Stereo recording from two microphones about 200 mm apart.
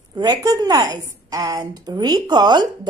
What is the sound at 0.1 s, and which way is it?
A woman's voice, 20° right (ahead or behind).